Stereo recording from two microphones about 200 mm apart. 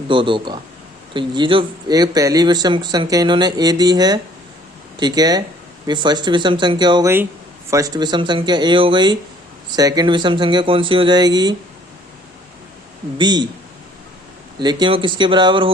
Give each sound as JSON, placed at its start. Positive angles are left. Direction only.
{"t": 0.1, "sound": "speech", "side_deg": -25}
{"t": 13.1, "sound": "speech", "side_deg": -20}
{"t": 14.6, "sound": "speech", "side_deg": -20}